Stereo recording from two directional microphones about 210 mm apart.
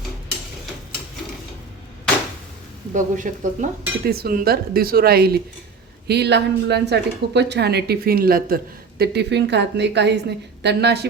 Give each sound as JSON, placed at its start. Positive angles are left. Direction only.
{"t": 2.9, "sound": "a woman's voice", "side_deg": -35}